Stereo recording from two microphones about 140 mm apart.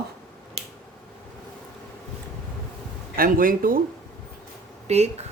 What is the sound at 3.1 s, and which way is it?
Speech, 85° right.